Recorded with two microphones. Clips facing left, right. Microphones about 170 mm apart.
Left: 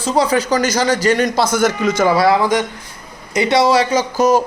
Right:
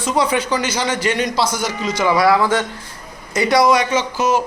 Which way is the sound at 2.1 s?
25° left (ahead or behind).